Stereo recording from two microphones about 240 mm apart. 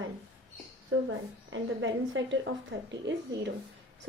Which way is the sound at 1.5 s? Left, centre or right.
Right.